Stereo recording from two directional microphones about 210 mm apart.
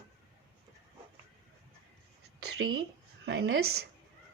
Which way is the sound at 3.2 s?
65° right (ahead or behind).